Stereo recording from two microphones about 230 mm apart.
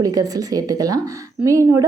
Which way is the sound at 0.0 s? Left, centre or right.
Centre.